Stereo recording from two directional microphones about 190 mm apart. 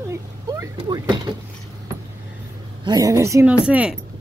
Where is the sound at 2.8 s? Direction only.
20° right (ahead or behind).